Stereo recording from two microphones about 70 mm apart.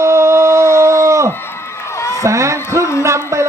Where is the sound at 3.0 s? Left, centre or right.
Right.